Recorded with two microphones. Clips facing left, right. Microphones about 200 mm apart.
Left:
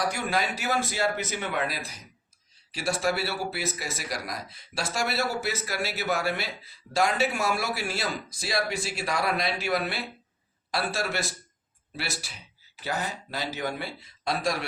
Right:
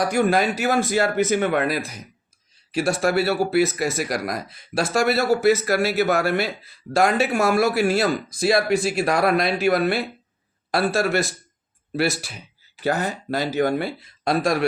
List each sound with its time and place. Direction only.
0.1 s speech: 50° right (ahead or behind)